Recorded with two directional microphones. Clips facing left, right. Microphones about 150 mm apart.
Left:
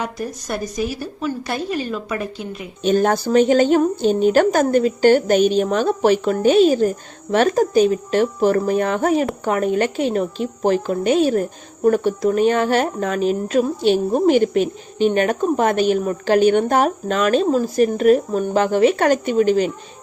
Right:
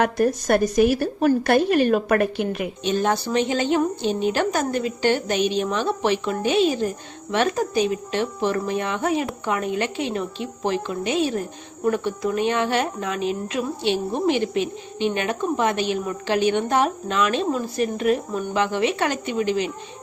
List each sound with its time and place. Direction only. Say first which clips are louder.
0.0 s speech: right 7 dB; 60° right (ahead or behind)
2.8 s speech: left 6 dB; 45° left (ahead or behind)